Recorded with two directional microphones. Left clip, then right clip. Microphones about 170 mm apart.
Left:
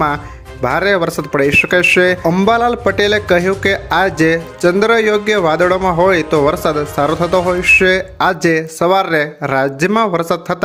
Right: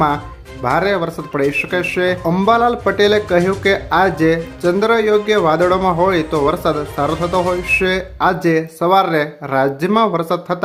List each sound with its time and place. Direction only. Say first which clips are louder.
0.6 s speech: left 2 dB; 25° left (ahead or behind)